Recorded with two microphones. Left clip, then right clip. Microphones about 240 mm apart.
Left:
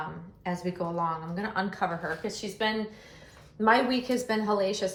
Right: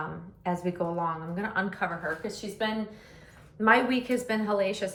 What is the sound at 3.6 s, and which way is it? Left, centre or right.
A woman's voice, centre.